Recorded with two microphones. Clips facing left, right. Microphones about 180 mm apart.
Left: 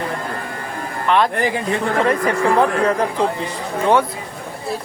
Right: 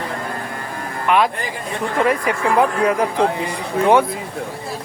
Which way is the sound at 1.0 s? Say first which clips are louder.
Left 1 dB; 10° right (ahead or behind).